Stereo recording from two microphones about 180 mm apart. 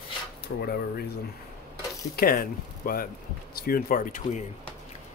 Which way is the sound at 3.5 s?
55° left (ahead or behind).